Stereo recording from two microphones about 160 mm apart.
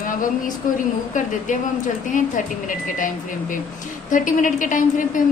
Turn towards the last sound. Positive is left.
turn(degrees=55)  # may be behind; listen again after turning